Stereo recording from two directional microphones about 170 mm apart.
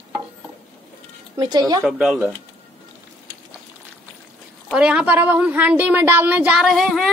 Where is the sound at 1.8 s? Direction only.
5° right (ahead or behind).